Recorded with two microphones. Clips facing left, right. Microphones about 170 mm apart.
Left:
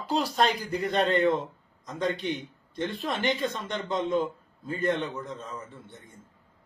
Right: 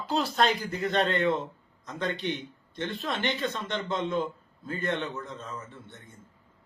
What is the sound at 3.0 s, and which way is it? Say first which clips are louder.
A man's voice: left 2 dB; 10° left (ahead or behind).